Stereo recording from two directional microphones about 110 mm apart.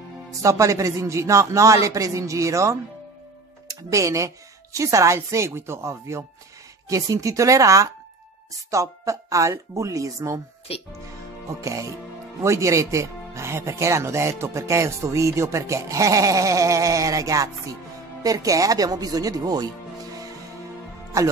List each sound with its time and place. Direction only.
0.4 s speech: 30° right (ahead or behind)
10.7 s speech: 65° left (ahead or behind)
11.4 s speech: 30° right (ahead or behind)
21.1 s speech: 25° right (ahead or behind)